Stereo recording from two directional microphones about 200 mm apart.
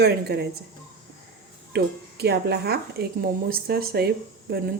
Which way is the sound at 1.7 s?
55° right (ahead or behind).